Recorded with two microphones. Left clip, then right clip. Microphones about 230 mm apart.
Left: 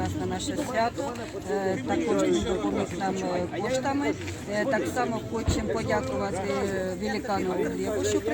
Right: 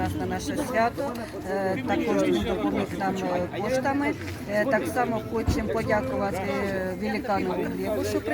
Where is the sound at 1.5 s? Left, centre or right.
Centre.